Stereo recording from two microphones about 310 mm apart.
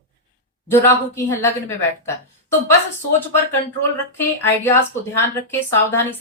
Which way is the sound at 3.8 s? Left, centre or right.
Centre.